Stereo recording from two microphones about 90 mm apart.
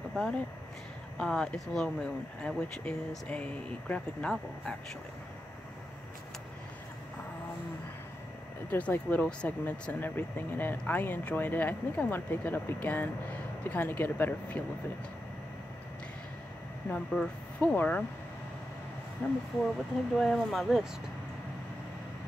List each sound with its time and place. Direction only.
0.1 s speech: 10° left (ahead or behind)
8.6 s speech: 15° left (ahead or behind)
16.9 s speech: 10° left (ahead or behind)
19.2 s speech: 20° left (ahead or behind)
20.2 s speech: centre (ahead or behind)